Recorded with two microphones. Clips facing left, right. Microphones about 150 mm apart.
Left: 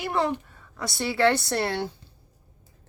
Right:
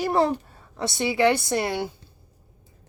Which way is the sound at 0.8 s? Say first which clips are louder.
Right 2 dB; 20° right (ahead or behind).